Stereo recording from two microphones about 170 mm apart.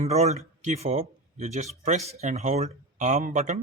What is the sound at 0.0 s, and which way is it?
Speech, 40° right (ahead or behind).